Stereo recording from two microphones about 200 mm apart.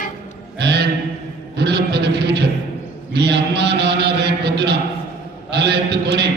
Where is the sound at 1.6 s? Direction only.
55° right (ahead or behind).